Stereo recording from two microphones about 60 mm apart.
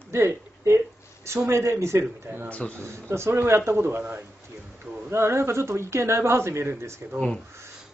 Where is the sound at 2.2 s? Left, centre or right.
Right.